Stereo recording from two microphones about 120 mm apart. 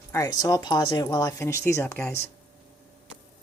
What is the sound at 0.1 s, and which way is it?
Speech, 30° left (ahead or behind).